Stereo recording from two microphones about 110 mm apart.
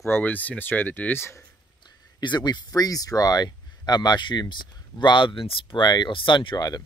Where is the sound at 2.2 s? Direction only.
40° left (ahead or behind).